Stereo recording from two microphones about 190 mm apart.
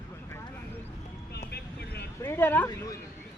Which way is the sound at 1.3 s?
60° left (ahead or behind).